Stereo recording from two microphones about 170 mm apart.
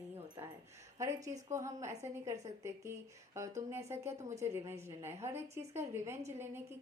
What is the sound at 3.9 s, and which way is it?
A woman's voice, 15° right (ahead or behind).